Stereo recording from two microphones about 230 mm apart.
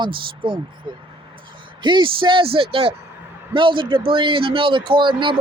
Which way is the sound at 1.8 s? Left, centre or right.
Centre.